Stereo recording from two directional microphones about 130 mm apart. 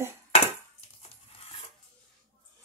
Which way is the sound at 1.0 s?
50° left (ahead or behind).